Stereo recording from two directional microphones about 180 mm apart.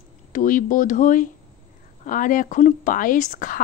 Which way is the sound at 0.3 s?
50° left (ahead or behind).